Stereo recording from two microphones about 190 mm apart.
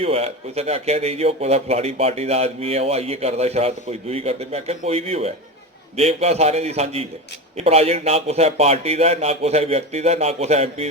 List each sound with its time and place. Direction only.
0.0 s a man's voice: 30° right (ahead or behind)